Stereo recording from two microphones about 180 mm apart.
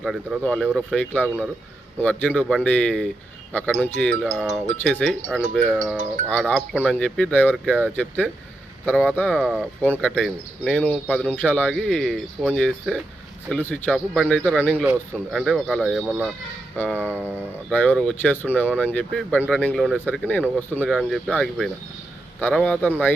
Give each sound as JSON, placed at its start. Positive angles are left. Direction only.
{"t": 0.0, "sound": "a man's voice", "side_deg": 0}
{"t": 16.7, "sound": "speech", "side_deg": 10}
{"t": 17.0, "sound": "speech", "side_deg": -10}
{"t": 17.7, "sound": "a man's voice", "side_deg": 5}